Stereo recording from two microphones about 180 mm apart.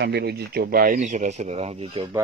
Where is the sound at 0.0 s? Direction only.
65° right (ahead or behind); by 2.0 s 35° right (ahead or behind).